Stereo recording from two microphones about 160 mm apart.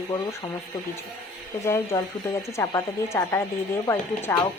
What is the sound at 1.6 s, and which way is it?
Speech, 15° left (ahead or behind).